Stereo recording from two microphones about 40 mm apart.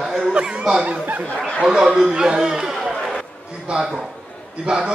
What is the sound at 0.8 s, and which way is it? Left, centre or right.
Speech, right.